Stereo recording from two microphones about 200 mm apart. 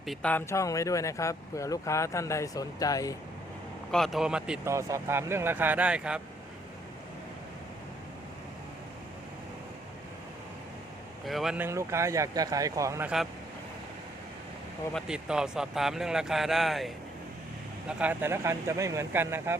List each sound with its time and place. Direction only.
0.0 s speech: centre (ahead or behind)
3.9 s speech: centre (ahead or behind)
4.7 s speech: 15° right (ahead or behind)
11.3 s speech: centre (ahead or behind)
14.9 s speech: 5° right (ahead or behind)